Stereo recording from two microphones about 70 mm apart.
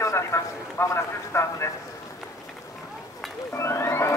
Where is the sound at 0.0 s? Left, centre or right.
Left.